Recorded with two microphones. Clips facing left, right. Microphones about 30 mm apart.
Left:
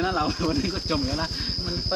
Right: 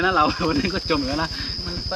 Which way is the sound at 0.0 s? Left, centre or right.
Right.